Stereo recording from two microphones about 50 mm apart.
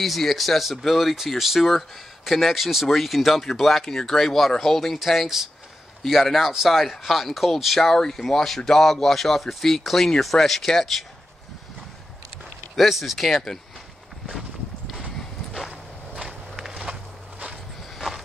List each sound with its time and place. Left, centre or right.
0.0 s speech: centre
12.7 s speech: centre
15.7 s walk: right
16.5 s walk: centre
17.9 s a sound: centre